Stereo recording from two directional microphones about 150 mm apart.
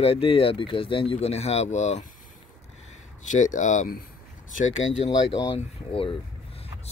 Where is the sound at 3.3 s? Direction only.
55° left (ahead or behind).